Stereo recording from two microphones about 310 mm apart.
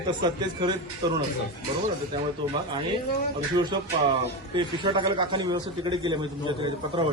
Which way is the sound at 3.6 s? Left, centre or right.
Centre.